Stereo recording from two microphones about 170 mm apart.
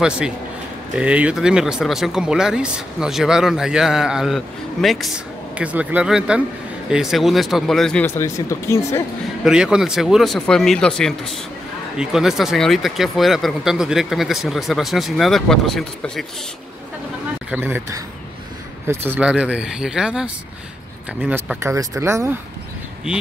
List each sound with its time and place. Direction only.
0.9 s speech: 5° right (ahead or behind); by 9.0 s 15° left (ahead or behind)
9.4 s speech: 5° right (ahead or behind)
17.5 s speech: 10° right (ahead or behind)
21.5 s speech: 15° right (ahead or behind)